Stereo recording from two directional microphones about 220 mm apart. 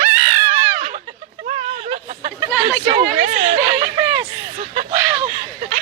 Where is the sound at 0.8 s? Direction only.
35° right (ahead or behind).